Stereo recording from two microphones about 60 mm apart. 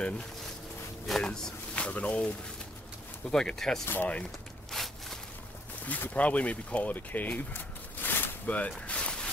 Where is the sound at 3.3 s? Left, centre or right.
Centre.